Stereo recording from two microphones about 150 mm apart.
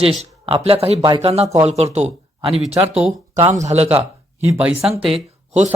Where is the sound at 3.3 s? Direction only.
50° right (ahead or behind).